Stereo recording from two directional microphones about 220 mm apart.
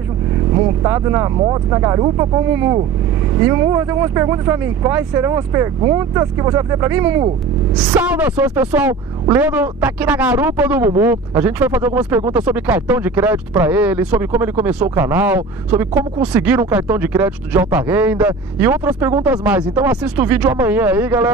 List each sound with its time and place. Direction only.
0.8 s speech: 15° right (ahead or behind)